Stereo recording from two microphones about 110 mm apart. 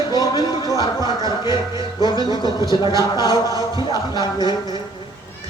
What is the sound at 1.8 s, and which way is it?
Speech, 45° left (ahead or behind).